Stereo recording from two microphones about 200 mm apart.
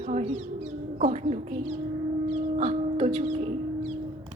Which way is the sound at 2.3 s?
30° right (ahead or behind).